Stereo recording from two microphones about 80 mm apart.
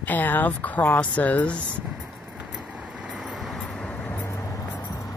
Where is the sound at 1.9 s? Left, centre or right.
Centre.